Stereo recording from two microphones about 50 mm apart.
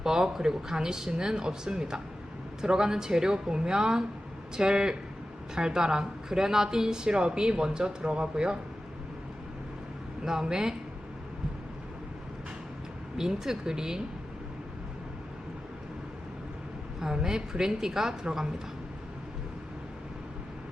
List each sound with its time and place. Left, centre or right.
0.0 s speech: centre
10.2 s speech: centre
13.1 s speech: centre
17.0 s speech: centre